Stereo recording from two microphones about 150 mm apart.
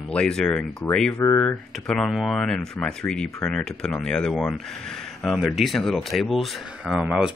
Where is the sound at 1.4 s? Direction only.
5° left (ahead or behind).